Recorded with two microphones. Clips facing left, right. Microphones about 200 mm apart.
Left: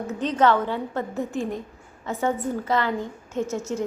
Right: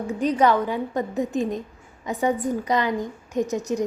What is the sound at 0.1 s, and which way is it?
A woman's voice, 10° right (ahead or behind).